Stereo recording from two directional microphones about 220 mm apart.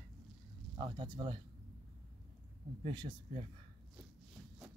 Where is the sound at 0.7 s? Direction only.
20° right (ahead or behind).